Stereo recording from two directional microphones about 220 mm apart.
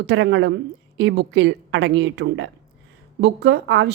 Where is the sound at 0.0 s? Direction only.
50° right (ahead or behind).